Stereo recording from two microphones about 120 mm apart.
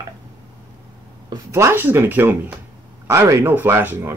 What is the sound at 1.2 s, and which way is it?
Speech, 25° right (ahead or behind).